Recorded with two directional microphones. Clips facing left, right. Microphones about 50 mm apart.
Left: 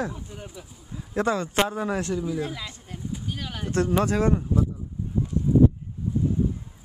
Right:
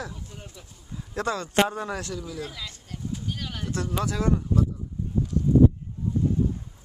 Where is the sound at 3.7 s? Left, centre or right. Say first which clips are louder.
Left 7 dB; left.